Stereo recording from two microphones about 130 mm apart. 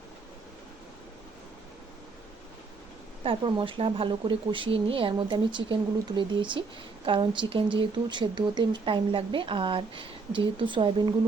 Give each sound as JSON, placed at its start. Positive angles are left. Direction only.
{"t": 3.2, "sound": "speech", "side_deg": -40}